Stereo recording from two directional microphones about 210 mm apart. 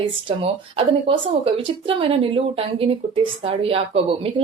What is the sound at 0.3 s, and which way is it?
A woman's voice, 25° right (ahead or behind).